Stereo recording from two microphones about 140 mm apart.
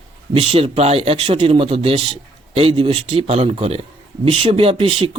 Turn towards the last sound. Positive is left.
turn(degrees=-40)  # may be behind; listen again after turning